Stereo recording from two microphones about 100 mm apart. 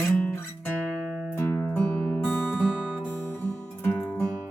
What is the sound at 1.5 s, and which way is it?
Music, 25° left (ahead or behind).